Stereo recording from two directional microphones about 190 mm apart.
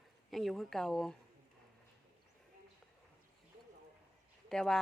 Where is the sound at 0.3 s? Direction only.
Centre (ahead or behind).